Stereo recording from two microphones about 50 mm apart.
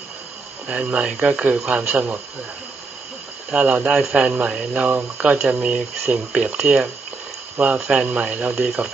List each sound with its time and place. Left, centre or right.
0.7 s speech: right
3.5 s speech: right
3.9 s a man's voice: centre
4.3 s speech: right